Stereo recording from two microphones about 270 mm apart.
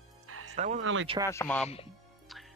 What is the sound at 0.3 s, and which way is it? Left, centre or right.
Music, right.